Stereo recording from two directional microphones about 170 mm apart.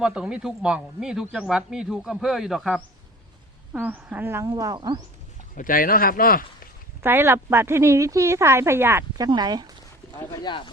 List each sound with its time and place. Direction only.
0.0 s speech: 5° right (ahead or behind); by 4.9 s 25° right (ahead or behind)
5.5 s speech: 55° left (ahead or behind)
7.0 s speech: 15° right (ahead or behind)
10.2 s speech: 25° left (ahead or behind)